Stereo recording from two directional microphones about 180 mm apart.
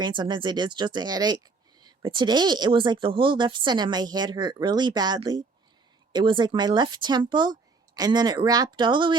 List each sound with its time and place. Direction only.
0.0 s speech: 25° right (ahead or behind)